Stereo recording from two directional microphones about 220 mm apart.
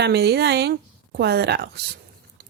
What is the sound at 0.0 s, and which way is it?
A woman's voice, 50° right (ahead or behind).